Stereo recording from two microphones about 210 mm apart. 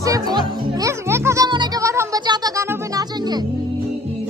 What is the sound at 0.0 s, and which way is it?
Music, 15° right (ahead or behind).